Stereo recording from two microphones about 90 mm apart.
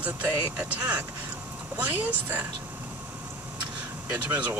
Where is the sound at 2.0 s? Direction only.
20° right (ahead or behind).